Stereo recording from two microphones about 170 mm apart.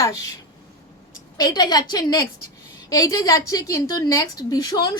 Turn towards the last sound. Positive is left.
turn(degrees=25)  # may be behind; listen again after turning